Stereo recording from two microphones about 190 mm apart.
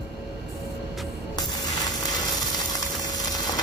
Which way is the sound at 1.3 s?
20° left (ahead or behind).